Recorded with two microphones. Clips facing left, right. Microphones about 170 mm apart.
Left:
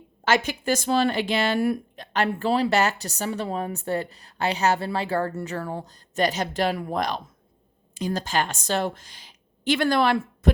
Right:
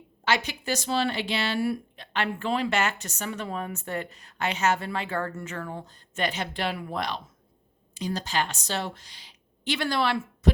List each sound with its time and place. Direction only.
0.3 s a woman's voice: 45° left (ahead or behind)